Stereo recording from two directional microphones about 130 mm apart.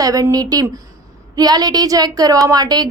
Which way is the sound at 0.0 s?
30° right (ahead or behind).